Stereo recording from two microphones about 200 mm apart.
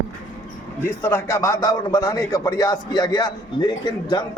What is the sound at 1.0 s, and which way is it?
A man's voice, 15° left (ahead or behind).